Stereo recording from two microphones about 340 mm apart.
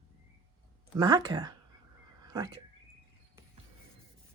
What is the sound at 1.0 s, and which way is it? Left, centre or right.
Speech, centre.